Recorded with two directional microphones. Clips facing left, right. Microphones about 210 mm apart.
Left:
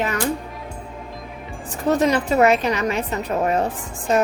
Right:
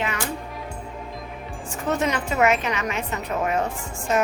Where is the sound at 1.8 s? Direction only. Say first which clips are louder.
Left 6 dB; 35° left (ahead or behind).